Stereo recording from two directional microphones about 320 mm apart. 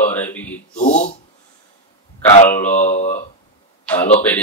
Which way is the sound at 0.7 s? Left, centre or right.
Left.